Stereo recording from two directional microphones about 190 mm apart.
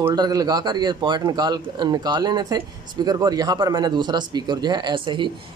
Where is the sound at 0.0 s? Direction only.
20° right (ahead or behind).